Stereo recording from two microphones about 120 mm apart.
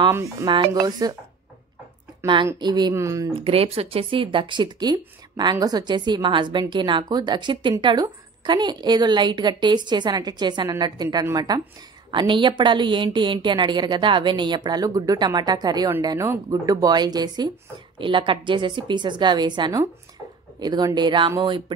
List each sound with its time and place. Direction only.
0.1 s speech: 25° right (ahead or behind)
2.4 s speech: 35° right (ahead or behind)
2.9 s speech: 25° right (ahead or behind)
3.4 s speech: 55° right (ahead or behind)